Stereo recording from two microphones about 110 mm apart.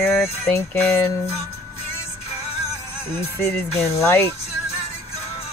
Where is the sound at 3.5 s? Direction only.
20° left (ahead or behind).